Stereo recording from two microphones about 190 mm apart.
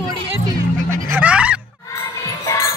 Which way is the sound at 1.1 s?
5° right (ahead or behind).